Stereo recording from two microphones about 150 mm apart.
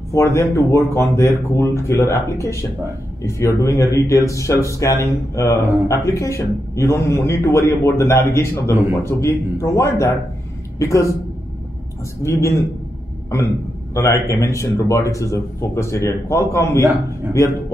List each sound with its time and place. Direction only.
0.1 s a man's voice: 20° left (ahead or behind)
12.2 s speech: 20° left (ahead or behind)
13.9 s speech: 20° left (ahead or behind)